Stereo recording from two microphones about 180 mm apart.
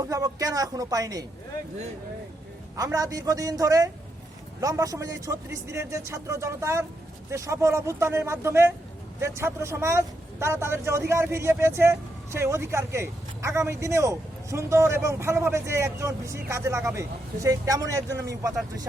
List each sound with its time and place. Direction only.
0.0 s speech: 20° right (ahead or behind)
2.7 s speech: 20° right (ahead or behind)